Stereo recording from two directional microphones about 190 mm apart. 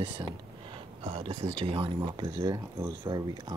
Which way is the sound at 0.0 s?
25° right (ahead or behind).